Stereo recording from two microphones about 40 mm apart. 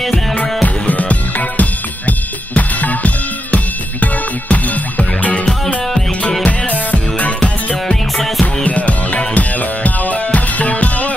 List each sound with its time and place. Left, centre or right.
0.0 s music: centre
0.8 s drum kit: left
3.5 s music: left
6.4 s music: left
7.3 s music: left
8.2 s music: centre
8.6 s music: left